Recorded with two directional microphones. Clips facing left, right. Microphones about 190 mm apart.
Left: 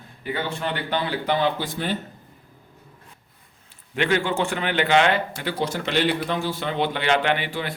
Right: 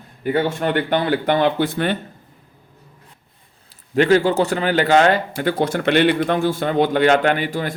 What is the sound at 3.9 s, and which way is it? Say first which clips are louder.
A man's voice: right 8 dB; 40° right (ahead or behind).